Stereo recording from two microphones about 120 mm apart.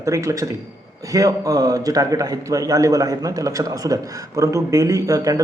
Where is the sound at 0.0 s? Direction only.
25° right (ahead or behind).